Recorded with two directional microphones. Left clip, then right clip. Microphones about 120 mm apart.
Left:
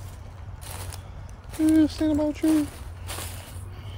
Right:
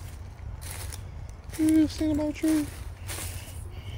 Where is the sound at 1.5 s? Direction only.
25° left (ahead or behind).